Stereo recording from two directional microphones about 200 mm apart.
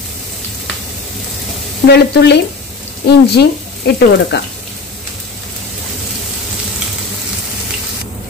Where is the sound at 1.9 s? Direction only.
55° left (ahead or behind).